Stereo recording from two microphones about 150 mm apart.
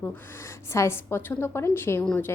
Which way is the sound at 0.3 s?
20° left (ahead or behind).